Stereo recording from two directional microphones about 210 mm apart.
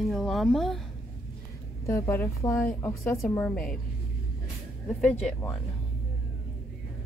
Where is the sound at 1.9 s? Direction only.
15° left (ahead or behind).